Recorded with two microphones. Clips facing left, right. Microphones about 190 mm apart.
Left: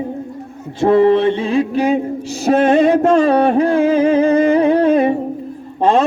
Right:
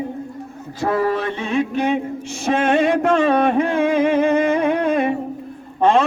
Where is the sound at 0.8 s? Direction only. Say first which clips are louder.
Left 9 dB; 25° left (ahead or behind).